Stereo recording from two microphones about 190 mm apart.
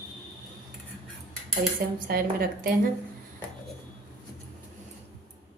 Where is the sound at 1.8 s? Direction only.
55° right (ahead or behind).